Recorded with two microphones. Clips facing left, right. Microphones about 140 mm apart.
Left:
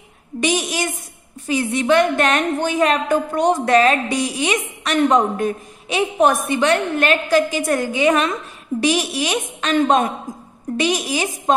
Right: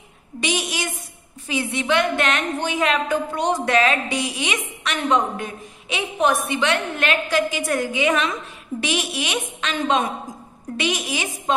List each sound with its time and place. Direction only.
0.4 s a woman's voice: 45° left (ahead or behind)
10.8 s a woman's voice: 40° left (ahead or behind)